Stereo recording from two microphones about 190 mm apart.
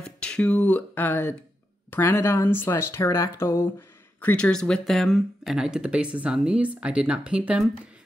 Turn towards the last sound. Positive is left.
turn(degrees=-5)  # may be behind; listen again after turning